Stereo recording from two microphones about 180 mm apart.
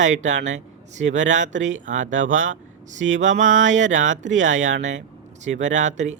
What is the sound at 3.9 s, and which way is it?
Speech, 90° right.